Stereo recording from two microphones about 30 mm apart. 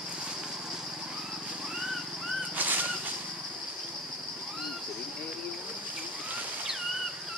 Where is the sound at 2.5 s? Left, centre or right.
Right.